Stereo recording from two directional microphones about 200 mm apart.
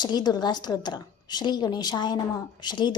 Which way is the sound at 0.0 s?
20° left (ahead or behind).